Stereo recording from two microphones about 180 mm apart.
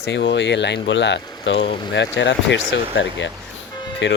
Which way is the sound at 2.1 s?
85° left.